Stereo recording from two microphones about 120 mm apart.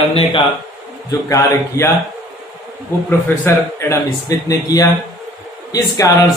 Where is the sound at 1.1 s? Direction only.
25° left (ahead or behind).